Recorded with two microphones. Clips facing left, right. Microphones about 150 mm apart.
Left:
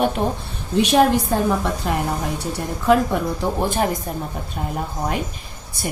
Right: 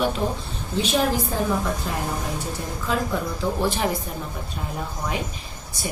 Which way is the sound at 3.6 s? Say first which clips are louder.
Left 4 dB; 50° left (ahead or behind).